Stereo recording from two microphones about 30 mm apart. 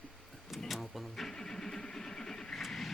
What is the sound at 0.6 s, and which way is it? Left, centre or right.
Vehicle, centre.